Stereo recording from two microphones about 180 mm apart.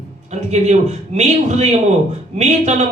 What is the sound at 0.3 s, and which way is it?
A man's voice, 40° right (ahead or behind).